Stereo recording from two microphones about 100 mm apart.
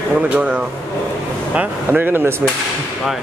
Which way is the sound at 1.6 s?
20° right (ahead or behind).